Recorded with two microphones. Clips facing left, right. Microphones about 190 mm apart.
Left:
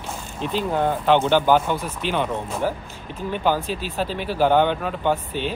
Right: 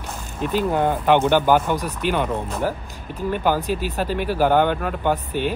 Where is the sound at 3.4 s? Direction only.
10° right (ahead or behind).